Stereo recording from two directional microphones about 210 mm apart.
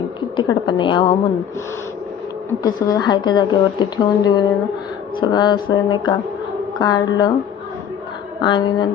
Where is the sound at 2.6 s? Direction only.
20° left (ahead or behind).